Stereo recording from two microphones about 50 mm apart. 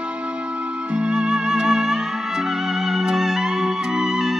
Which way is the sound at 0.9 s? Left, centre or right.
Centre.